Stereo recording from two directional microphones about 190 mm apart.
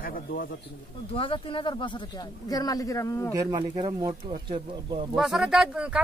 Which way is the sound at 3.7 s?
20° right (ahead or behind).